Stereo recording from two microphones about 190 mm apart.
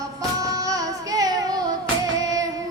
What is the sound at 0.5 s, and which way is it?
Music, 20° right (ahead or behind).